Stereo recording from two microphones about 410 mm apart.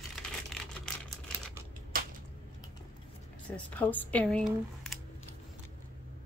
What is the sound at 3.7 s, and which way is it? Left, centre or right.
Speech, centre.